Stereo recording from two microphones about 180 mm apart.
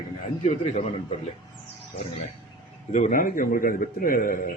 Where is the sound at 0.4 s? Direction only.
40° left (ahead or behind).